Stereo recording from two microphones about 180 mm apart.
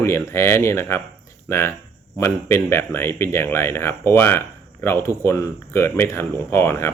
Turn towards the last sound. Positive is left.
turn(degrees=15)  # may be behind; listen again after turning